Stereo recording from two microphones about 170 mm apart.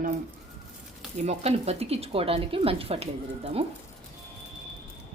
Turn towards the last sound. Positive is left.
turn(degrees=-35)  # may be behind; listen again after turning